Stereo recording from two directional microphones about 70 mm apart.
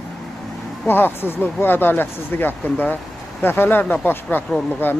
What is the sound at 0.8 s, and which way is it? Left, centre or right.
Speech, left.